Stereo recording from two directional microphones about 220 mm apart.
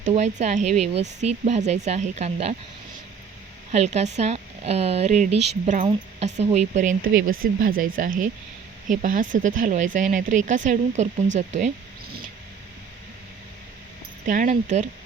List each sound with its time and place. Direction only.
0.0 s speech: 30° right (ahead or behind)
3.7 s speech: 30° right (ahead or behind)
14.3 s speech: 35° right (ahead or behind)